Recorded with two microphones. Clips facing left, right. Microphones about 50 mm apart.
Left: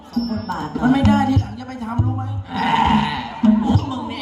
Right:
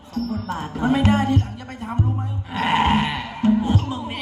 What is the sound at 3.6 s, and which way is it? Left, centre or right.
Music, right.